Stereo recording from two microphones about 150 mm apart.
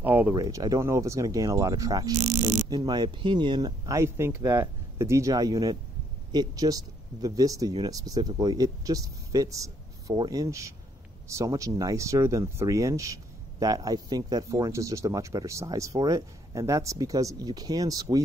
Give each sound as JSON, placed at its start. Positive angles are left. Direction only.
{"t": 0.0, "sound": "a sound", "side_deg": -10}
{"t": 0.3, "sound": "speech", "side_deg": -20}
{"t": 2.1, "sound": "speech", "side_deg": -55}
{"t": 2.7, "sound": "speech", "side_deg": -25}